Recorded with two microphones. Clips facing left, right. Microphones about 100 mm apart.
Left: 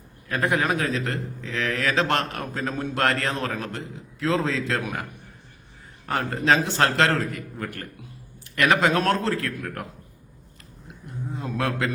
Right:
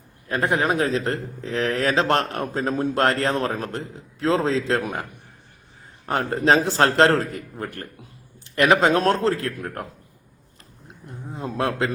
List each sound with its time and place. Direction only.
0.3 s a man's voice: 30° right (ahead or behind)
6.1 s a man's voice: 30° right (ahead or behind)
11.3 s a man's voice: 30° right (ahead or behind)